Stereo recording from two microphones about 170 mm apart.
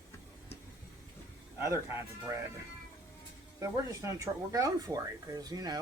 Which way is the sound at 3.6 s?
20° right (ahead or behind).